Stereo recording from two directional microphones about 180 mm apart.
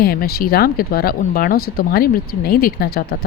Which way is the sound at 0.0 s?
55° left (ahead or behind).